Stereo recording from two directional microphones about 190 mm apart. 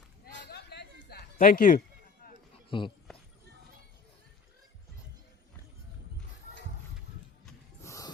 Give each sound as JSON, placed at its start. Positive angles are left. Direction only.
{"t": 0.5, "sound": "chatter", "side_deg": 60}
{"t": 1.4, "sound": "speech", "side_deg": 45}
{"t": 2.6, "sound": "speech", "side_deg": 25}
{"t": 7.8, "sound": "a sound", "side_deg": 15}